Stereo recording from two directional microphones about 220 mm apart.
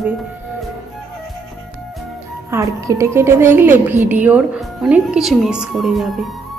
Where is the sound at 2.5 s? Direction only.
15° right (ahead or behind).